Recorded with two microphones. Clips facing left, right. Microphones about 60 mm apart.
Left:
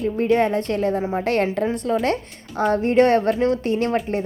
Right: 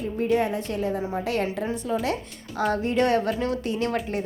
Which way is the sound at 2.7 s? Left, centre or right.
Left.